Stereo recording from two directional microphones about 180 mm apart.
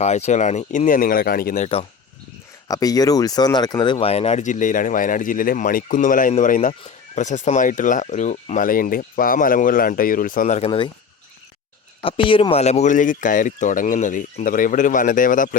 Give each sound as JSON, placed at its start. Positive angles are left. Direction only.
{"t": 0.0, "sound": "speech", "side_deg": 40}
{"t": 1.6, "sound": "speech", "side_deg": 35}
{"t": 2.6, "sound": "speech", "side_deg": 20}
{"t": 12.0, "sound": "speech", "side_deg": 30}